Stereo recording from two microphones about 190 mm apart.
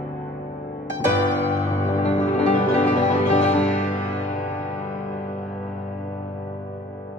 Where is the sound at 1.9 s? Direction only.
35° left (ahead or behind).